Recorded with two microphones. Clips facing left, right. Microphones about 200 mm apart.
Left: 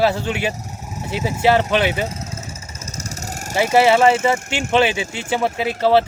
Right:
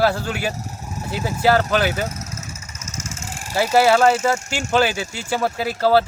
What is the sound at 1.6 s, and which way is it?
Vehicle, 25° left (ahead or behind).